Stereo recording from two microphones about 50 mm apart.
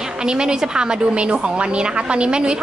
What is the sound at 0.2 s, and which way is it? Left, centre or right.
A woman's voice, centre.